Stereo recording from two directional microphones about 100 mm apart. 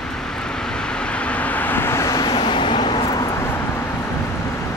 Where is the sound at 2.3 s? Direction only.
55° left (ahead or behind).